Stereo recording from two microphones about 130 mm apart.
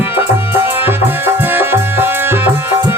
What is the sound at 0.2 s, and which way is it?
Music, 15° right (ahead or behind).